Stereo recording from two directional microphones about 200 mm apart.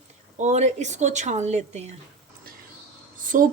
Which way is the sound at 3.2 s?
45° right (ahead or behind).